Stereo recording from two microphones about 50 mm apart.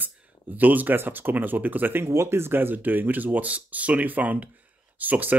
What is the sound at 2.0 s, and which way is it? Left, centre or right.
Speech, right.